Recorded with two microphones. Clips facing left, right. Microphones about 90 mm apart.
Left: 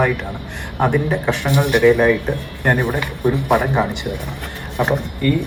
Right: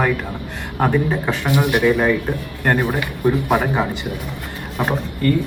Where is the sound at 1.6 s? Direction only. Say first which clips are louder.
Left 4 dB; 15° right (ahead or behind).